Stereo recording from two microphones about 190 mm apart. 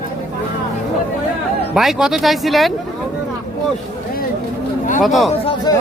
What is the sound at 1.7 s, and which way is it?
Speech, centre (ahead or behind).